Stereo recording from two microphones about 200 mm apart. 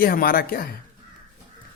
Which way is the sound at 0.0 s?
45° left (ahead or behind).